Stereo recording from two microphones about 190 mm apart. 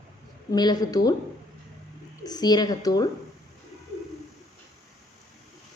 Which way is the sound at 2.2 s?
20° left (ahead or behind).